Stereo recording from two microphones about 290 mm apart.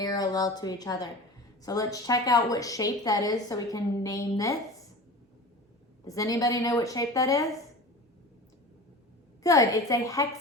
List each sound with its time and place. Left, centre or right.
0.0 s a woman's voice: centre
6.1 s a woman's voice: centre
9.4 s a woman's voice: centre